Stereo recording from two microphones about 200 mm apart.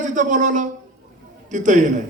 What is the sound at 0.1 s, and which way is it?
A man's voice, 40° right (ahead or behind).